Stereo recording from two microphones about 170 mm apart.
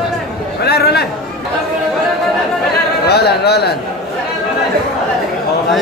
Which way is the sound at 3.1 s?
70° left (ahead or behind).